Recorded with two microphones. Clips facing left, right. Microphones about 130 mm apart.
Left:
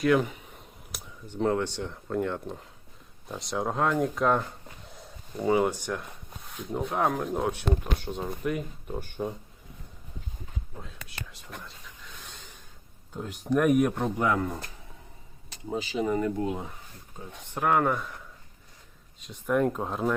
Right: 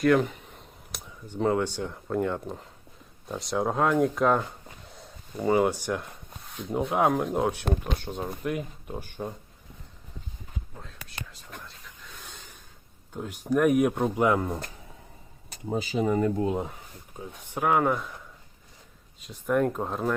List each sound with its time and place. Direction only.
0.0 s speech: 5° left (ahead or behind)
10.8 s whispering: 5° left (ahead or behind)
13.1 s speech: 5° right (ahead or behind)
14.2 s speech: 25° right (ahead or behind)
15.7 s speech: 45° right (ahead or behind)
17.2 s speech: 5° right (ahead or behind)
19.2 s speech: centre (ahead or behind)